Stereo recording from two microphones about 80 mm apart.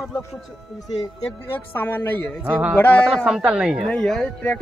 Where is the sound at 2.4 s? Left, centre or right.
Centre.